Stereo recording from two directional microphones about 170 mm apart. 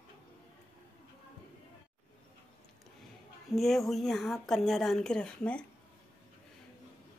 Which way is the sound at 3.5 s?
Centre (ahead or behind).